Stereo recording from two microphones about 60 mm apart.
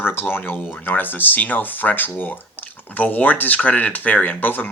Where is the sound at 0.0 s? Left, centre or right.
Left.